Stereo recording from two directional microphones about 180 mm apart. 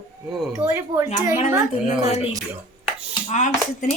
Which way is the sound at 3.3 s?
40° left (ahead or behind).